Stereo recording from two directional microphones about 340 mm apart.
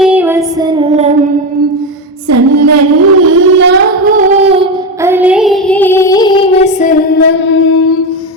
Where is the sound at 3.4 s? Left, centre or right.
Right; by 6.7 s centre.